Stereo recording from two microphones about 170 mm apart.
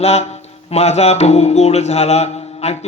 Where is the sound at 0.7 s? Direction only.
40° left (ahead or behind).